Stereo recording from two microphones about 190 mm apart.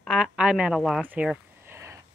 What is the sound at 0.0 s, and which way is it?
A woman's voice, 5° right (ahead or behind).